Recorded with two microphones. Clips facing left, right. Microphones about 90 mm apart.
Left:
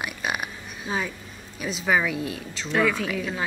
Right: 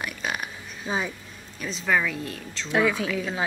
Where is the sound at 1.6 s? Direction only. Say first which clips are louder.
Left 1 dB; 10° left (ahead or behind).